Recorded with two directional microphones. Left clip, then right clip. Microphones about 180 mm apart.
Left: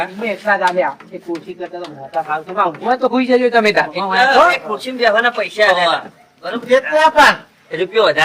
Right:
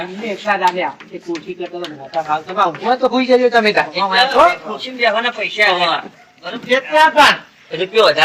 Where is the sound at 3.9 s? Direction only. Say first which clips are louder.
Right 2 dB; 35° left (ahead or behind).